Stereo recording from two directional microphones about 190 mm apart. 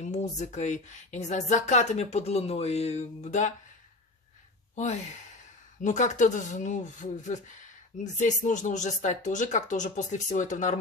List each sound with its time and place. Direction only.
0.0 s speech: 40° left (ahead or behind)
4.7 s speech: 35° left (ahead or behind)